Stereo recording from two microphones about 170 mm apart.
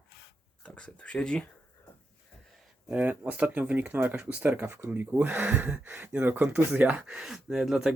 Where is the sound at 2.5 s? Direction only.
10° right (ahead or behind).